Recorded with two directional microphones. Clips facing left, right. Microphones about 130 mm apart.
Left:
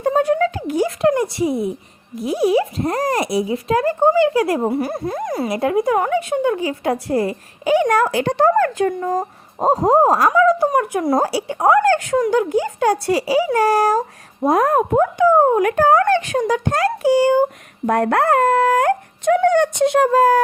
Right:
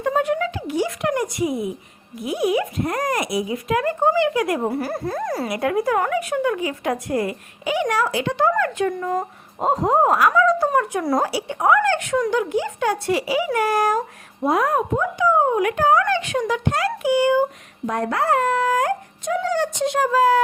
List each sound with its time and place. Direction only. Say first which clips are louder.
0.0 s a sound: left 4 dB; 35° left (ahead or behind)
1.0 s a woman's voice: left 5 dB; 30° left (ahead or behind)
11.3 s a woman's voice: left 3 dB; 35° left (ahead or behind)
17.8 s speech: left 5 dB; 60° left (ahead or behind)